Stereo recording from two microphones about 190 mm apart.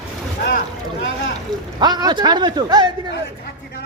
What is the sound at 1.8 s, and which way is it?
A man's voice, 20° right (ahead or behind).